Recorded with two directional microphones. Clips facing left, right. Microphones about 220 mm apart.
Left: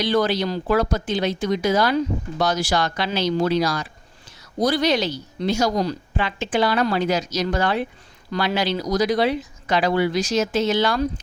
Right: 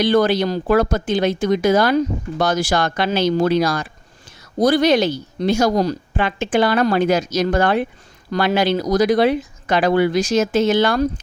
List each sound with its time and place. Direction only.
0.0 s speech: 50° right (ahead or behind)